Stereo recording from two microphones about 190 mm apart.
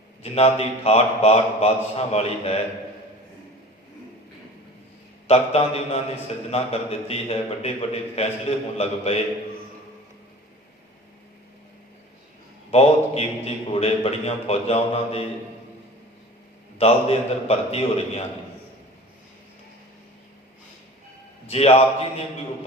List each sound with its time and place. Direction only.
0.2 s a man's voice: 30° left (ahead or behind)
5.3 s a man's voice: 30° left (ahead or behind)
12.7 s a man's voice: 30° left (ahead or behind)
16.7 s a man's voice: 30° left (ahead or behind)
21.4 s a man's voice: 30° left (ahead or behind)